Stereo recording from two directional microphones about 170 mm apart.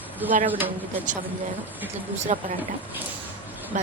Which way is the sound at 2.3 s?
45° right (ahead or behind).